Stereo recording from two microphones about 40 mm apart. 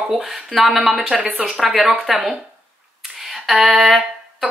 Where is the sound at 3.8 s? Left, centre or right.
Centre.